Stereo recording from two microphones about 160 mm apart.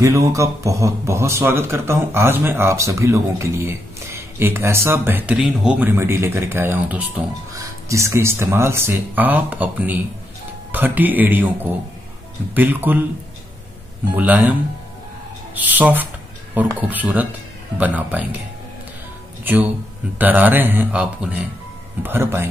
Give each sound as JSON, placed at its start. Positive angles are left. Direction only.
{"t": 0.0, "sound": "speech", "side_deg": -20}
{"t": 14.1, "sound": "speech", "side_deg": -10}
{"t": 19.4, "sound": "speech", "side_deg": -10}